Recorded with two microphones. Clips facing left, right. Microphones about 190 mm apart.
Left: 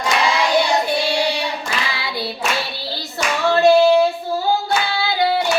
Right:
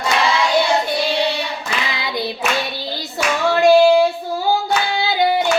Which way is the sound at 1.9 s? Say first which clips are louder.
Right 2 dB; 20° right (ahead or behind).